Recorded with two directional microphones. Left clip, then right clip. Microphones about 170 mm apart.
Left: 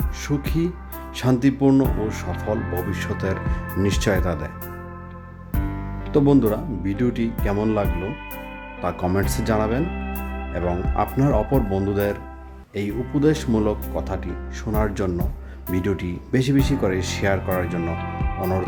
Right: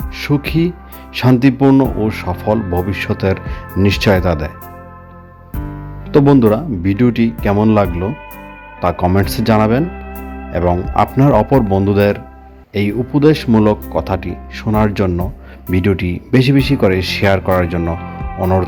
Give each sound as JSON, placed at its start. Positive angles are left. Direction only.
{"t": 0.2, "sound": "speech", "side_deg": -20}
{"t": 6.1, "sound": "speech", "side_deg": -20}
{"t": 8.8, "sound": "speech", "side_deg": -15}